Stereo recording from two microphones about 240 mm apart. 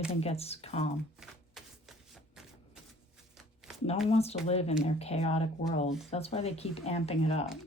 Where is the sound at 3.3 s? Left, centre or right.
Centre.